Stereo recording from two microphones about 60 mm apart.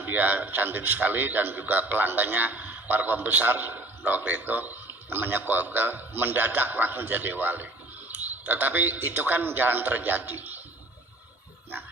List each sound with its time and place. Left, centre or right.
0.0 s a man's voice: right